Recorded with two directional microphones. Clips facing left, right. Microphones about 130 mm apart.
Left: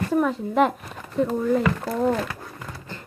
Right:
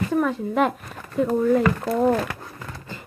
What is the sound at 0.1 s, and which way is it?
Speech, centre (ahead or behind).